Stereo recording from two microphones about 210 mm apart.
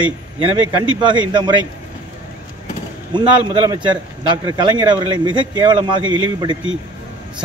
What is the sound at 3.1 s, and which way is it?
A man's voice, 20° right (ahead or behind).